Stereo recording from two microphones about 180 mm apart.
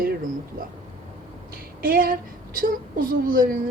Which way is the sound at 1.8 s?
55° right (ahead or behind).